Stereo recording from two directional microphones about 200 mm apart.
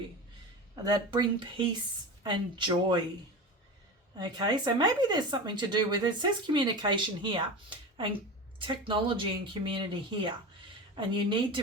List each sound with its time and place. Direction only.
0.9 s speech: 20° right (ahead or behind)
4.2 s speech: 20° right (ahead or behind)